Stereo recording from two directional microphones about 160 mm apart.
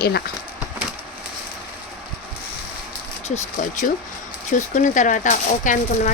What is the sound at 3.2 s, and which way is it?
Speech, 50° left (ahead or behind).